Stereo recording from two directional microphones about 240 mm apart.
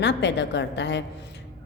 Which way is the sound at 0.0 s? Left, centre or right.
Left.